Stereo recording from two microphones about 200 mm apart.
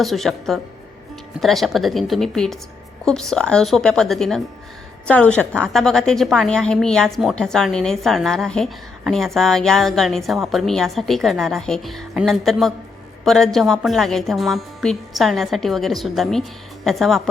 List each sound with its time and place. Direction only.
0.0 s a woman's voice: centre (ahead or behind)